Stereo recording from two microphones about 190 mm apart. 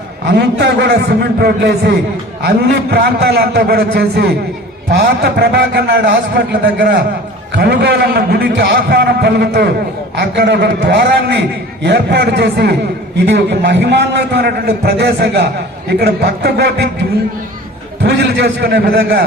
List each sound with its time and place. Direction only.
0.3 s a man's voice: 65° right (ahead or behind)
18.0 s a man's voice: 65° right (ahead or behind)